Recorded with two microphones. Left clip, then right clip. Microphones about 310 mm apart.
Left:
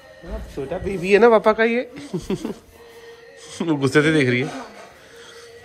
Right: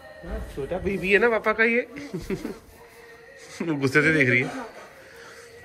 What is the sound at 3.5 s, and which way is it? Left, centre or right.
Speech, centre.